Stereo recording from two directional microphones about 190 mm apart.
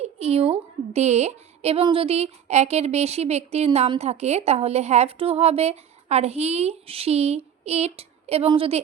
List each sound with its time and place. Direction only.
0.0 s a woman's voice: 35° right (ahead or behind)